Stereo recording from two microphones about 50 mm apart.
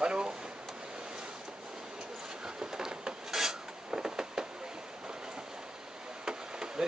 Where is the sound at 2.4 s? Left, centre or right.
Centre.